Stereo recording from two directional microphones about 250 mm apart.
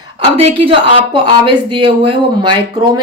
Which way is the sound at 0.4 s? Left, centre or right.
Right.